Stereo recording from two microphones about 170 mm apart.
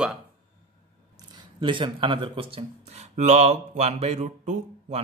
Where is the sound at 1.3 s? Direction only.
30° right (ahead or behind).